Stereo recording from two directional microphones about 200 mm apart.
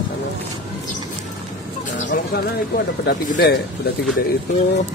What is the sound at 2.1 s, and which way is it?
Speech, 55° left (ahead or behind).